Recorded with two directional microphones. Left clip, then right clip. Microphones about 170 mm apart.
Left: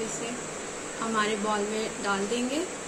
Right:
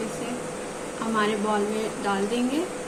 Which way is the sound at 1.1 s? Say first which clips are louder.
Right 3 dB; centre (ahead or behind).